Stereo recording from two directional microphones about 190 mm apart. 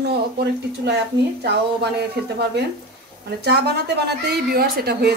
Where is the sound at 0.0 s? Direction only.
60° right (ahead or behind).